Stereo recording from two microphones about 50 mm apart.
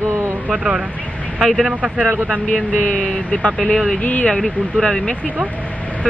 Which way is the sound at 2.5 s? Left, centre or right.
Left.